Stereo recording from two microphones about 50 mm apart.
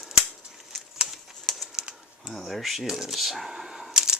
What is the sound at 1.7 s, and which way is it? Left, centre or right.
Typing, centre.